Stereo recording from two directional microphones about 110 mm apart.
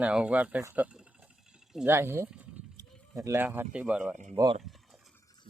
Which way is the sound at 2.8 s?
30° right (ahead or behind).